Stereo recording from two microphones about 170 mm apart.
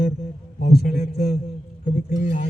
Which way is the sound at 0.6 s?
60° left (ahead or behind).